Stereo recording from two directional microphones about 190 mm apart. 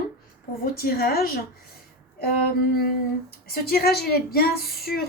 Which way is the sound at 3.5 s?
55° left (ahead or behind).